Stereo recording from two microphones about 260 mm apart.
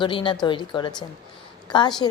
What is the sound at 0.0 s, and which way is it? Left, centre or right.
A woman's voice, centre.